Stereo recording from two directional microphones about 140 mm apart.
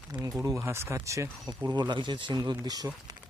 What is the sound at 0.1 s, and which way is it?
Speech, 25° right (ahead or behind).